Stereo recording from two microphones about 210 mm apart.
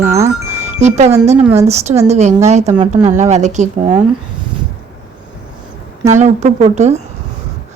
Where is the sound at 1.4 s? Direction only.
10° right (ahead or behind).